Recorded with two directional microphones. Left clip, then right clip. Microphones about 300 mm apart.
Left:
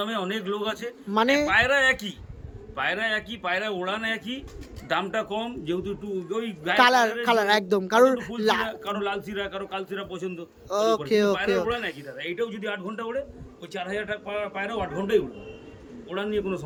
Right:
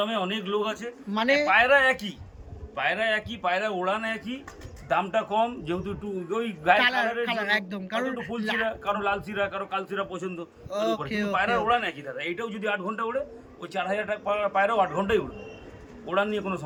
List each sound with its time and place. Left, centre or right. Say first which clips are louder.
0.0 s a man's voice: right 1 dB; centre
6.8 s a man's voice: left 4 dB; centre
10.8 s speech: left 5 dB; centre
11.3 s a man's voice: right 2 dB; centre